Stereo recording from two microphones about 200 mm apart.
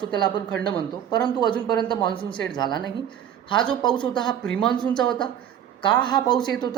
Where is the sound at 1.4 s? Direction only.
20° left (ahead or behind).